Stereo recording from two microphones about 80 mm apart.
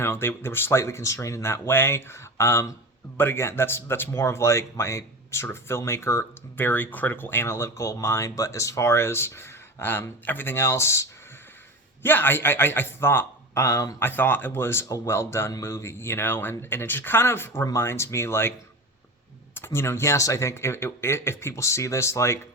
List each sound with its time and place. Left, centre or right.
0.0 s a man's voice: left
19.5 s speech: left